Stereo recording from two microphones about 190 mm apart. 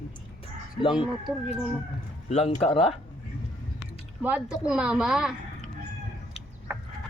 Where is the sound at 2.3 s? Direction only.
35° left (ahead or behind).